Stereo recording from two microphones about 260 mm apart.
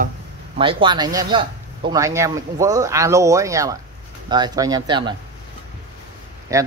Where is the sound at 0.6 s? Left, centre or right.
Centre.